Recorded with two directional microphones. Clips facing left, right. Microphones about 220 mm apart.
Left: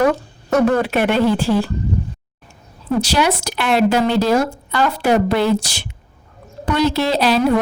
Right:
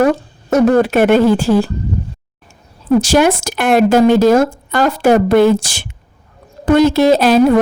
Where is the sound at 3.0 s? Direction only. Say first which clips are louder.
Right 6 dB; 50° right (ahead or behind).